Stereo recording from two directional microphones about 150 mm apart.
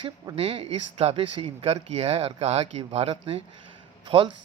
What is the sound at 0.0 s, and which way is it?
Speech, 40° right (ahead or behind).